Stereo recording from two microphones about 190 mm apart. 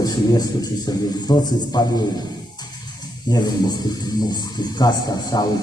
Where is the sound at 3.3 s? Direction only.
20° left (ahead or behind).